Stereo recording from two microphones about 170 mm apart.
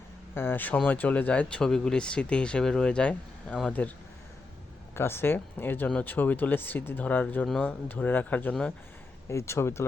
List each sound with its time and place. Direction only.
0.3 s speech: 10° left (ahead or behind)
4.9 s speech: 15° left (ahead or behind)